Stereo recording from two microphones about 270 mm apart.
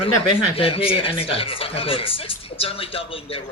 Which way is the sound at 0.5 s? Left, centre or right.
Centre.